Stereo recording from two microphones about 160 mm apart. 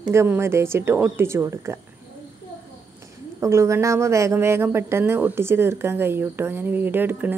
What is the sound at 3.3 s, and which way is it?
Speech, 15° right (ahead or behind).